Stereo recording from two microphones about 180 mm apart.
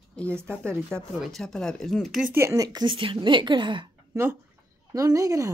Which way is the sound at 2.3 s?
15° right (ahead or behind).